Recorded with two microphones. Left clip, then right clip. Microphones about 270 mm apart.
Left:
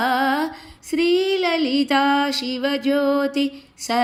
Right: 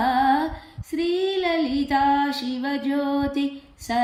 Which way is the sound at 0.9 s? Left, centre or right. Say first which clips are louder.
Left 5 dB; centre.